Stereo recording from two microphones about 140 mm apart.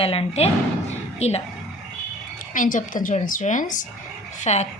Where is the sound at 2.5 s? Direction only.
70° left (ahead or behind).